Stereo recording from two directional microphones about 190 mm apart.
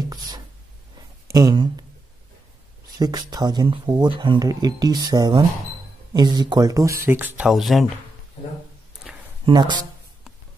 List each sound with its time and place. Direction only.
1.2 s speech: 20° right (ahead or behind)
3.0 s speech: 20° right (ahead or behind); by 7.8 s centre (ahead or behind)
9.5 s speech: 25° right (ahead or behind)